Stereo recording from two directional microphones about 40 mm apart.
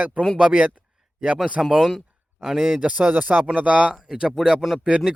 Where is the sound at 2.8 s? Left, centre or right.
Right.